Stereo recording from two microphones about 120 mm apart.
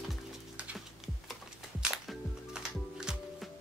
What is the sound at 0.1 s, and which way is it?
Music, centre (ahead or behind).